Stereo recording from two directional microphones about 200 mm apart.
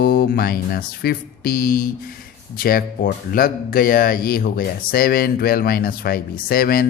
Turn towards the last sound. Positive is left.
turn(degrees=45)  # may be behind; listen again after turning